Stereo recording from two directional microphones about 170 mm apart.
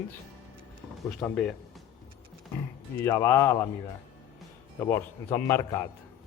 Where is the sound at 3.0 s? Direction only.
15° left (ahead or behind).